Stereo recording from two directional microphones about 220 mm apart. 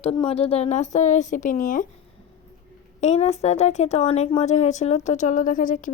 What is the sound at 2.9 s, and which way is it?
Speech, 30° left (ahead or behind).